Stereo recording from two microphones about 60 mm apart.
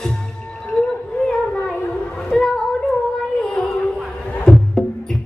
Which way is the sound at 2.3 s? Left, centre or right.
Centre.